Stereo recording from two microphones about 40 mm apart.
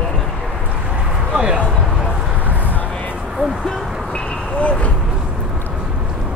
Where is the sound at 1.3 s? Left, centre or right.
Right.